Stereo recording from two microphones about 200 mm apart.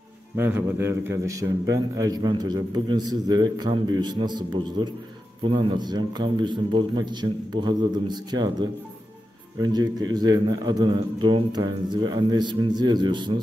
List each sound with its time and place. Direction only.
0.4 s a man's voice: 10° right (ahead or behind)